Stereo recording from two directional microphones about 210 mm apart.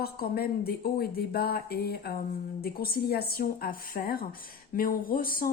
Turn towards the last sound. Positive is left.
turn(degrees=40)  # may be behind; listen again after turning